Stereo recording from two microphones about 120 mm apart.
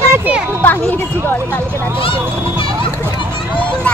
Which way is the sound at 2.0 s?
45° left (ahead or behind).